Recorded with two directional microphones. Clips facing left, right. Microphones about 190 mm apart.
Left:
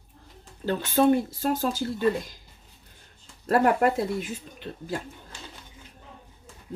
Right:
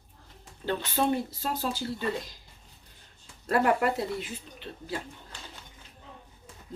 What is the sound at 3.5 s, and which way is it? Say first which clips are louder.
Speech: left 4 dB; 45° left (ahead or behind).